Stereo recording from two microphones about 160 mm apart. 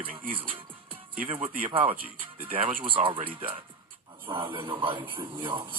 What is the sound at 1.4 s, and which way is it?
Speech, 35° right (ahead or behind).